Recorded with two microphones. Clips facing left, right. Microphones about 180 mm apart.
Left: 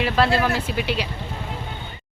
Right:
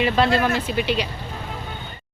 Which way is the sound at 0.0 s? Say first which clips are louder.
Right 1 dB; 5° left (ahead or behind).